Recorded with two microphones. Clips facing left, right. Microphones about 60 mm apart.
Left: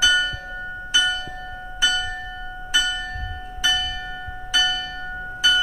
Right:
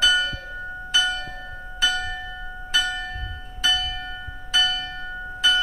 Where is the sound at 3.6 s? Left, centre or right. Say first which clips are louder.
Left 1 dB; centre.